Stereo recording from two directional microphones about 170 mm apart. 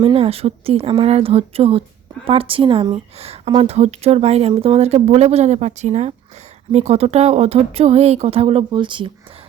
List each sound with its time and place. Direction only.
0.0 s speech: 35° right (ahead or behind)